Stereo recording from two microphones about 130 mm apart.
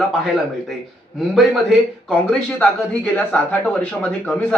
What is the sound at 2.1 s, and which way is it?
Speech, 5° left (ahead or behind).